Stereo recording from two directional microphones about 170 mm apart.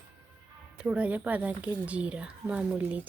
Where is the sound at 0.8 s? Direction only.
5° right (ahead or behind).